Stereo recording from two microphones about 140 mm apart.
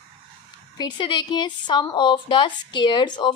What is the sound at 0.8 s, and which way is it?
A woman's voice, 35° left (ahead or behind).